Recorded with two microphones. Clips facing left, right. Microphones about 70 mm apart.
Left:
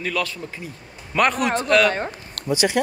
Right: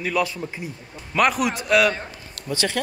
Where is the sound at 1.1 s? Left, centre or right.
Centre.